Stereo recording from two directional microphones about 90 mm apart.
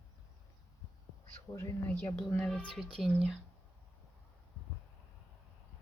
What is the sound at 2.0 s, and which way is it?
Speech, 20° left (ahead or behind).